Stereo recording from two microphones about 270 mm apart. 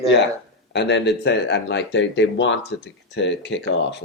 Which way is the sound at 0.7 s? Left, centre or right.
Left.